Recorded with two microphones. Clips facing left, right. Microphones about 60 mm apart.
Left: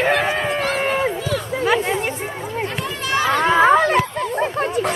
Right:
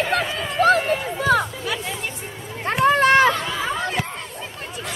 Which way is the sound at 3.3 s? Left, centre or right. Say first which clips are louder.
Left 12 dB; left.